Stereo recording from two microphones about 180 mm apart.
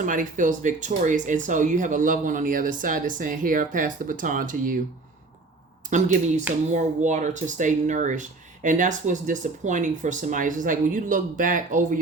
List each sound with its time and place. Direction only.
0.0 s speech: 45° right (ahead or behind)
5.9 s speech: 40° right (ahead or behind)